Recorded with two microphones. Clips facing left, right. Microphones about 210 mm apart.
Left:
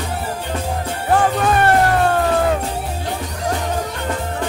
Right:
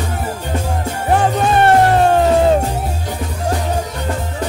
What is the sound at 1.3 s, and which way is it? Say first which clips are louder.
Music: right 3 dB; 25° right (ahead or behind).